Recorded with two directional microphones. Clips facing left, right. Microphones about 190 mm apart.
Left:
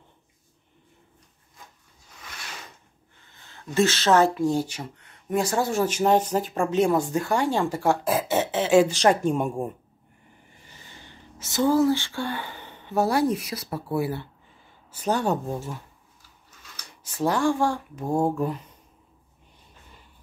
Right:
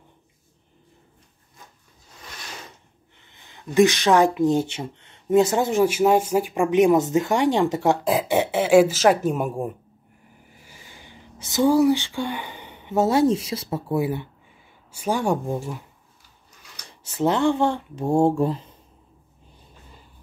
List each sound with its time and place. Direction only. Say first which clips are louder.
3.3 s speech: right 3 dB; 20° right (ahead or behind)
17.0 s speech: right 3 dB; 25° right (ahead or behind)